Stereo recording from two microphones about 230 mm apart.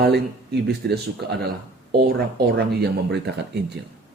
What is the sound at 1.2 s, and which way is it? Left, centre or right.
Speech, right.